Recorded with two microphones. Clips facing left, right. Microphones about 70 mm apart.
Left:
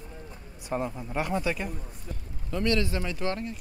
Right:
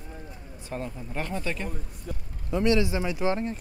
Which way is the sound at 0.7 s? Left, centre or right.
Centre.